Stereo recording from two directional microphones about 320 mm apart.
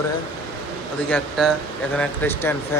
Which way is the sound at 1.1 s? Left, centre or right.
Centre.